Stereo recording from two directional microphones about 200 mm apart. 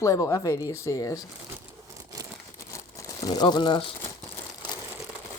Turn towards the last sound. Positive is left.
turn(degrees=25)  # may be behind; listen again after turning